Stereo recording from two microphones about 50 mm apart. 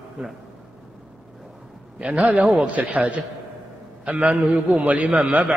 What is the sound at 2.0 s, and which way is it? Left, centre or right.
A man's voice, right.